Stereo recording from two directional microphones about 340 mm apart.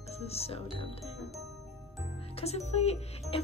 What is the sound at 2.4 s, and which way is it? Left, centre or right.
Speech, centre.